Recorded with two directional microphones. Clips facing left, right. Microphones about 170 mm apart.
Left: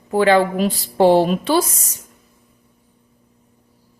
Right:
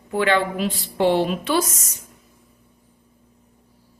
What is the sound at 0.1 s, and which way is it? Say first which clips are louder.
A woman's voice: left 6 dB; 35° left (ahead or behind).